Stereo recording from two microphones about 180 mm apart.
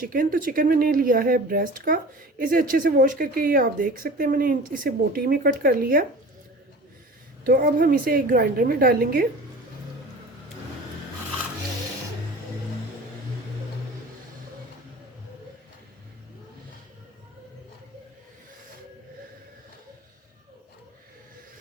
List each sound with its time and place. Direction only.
0.0 s speech: 50° right (ahead or behind)
7.4 s speech: 55° right (ahead or behind)